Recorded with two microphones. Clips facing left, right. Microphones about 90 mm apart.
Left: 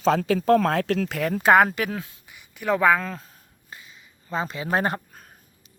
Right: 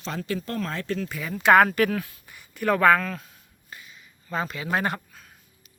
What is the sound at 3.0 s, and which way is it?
Speech, 25° left (ahead or behind).